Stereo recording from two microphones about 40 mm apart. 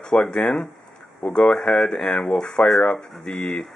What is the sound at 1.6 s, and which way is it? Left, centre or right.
Speech, left.